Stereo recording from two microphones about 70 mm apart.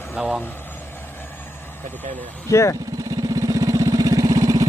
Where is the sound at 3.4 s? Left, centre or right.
Right.